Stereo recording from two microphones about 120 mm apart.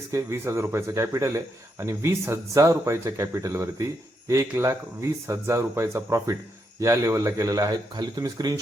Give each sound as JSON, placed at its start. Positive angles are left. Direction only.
{"t": 0.1, "sound": "speech", "side_deg": -25}